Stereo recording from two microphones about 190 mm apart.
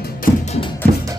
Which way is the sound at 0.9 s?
50° right (ahead or behind).